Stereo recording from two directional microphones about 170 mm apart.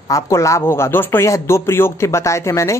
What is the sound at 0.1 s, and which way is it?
Speech, 20° left (ahead or behind).